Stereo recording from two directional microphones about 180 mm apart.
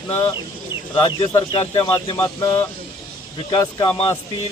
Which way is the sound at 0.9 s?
30° left (ahead or behind).